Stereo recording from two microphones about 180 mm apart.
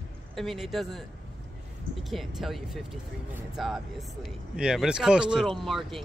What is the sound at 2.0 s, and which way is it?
Speech, centre (ahead or behind).